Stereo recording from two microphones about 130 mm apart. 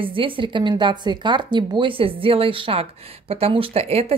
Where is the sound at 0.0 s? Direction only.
45° right (ahead or behind).